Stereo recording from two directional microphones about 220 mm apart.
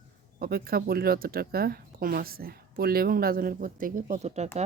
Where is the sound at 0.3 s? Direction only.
45° right (ahead or behind).